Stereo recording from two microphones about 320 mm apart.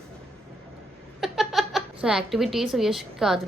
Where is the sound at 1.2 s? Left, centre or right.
Centre.